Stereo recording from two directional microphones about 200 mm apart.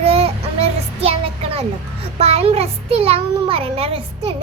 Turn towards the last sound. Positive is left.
turn(degrees=-30)  # may be behind; listen again after turning